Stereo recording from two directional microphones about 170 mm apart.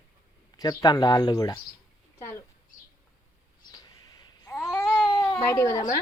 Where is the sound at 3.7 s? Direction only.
25° left (ahead or behind).